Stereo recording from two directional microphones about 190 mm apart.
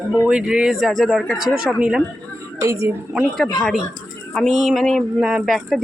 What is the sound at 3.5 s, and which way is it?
A woman's voice, centre (ahead or behind).